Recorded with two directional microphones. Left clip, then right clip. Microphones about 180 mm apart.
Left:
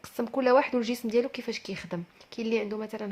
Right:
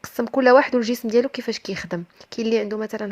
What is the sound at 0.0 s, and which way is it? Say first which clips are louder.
Speech: right 9 dB; 35° right (ahead or behind).